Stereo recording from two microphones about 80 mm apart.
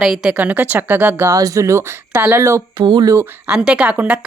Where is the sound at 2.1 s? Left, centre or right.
Right.